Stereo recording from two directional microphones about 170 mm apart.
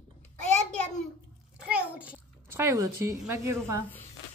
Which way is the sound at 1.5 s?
5° right (ahead or behind).